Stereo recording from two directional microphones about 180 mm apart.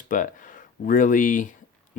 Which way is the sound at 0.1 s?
45° left (ahead or behind).